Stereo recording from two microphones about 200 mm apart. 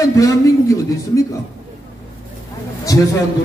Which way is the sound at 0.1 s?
15° left (ahead or behind).